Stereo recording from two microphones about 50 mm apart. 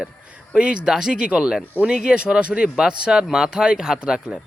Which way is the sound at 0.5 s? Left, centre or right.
Right.